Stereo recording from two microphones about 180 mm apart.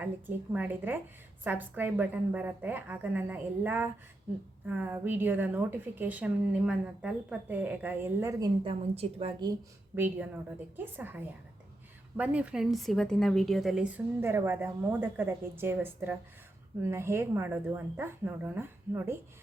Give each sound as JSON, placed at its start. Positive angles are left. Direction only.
{"t": 0.0, "sound": "a woman's voice", "side_deg": -10}
{"t": 8.6, "sound": "a woman's voice", "side_deg": -35}
{"t": 9.9, "sound": "a woman's voice", "side_deg": -10}